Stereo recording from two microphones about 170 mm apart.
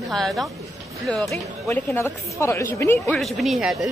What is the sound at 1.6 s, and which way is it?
A woman's voice, 15° left (ahead or behind).